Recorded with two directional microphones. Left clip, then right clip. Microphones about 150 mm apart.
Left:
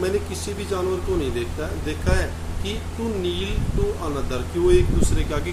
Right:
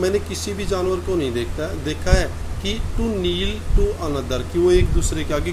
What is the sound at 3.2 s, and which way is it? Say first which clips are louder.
Speech: right 3 dB; 45° right (ahead or behind).